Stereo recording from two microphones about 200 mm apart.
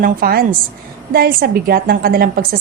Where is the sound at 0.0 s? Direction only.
45° right (ahead or behind).